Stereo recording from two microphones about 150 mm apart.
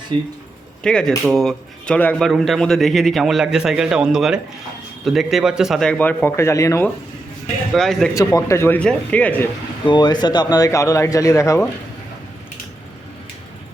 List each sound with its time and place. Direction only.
0.1 s speech: 30° right (ahead or behind)
0.8 s a man's voice: 5° left (ahead or behind)
7.7 s speech: 5° left (ahead or behind)
8.1 s a man's voice: 20° left (ahead or behind)
9.8 s speech: 30° left (ahead or behind)